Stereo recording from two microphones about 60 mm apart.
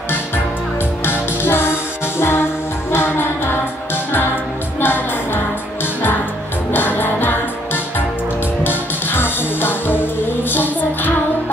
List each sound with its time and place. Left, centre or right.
1.0 s music: left
4.7 s music: left
6.7 s music: left